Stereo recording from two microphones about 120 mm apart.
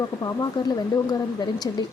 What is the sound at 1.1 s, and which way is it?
Speech, 35° left (ahead or behind).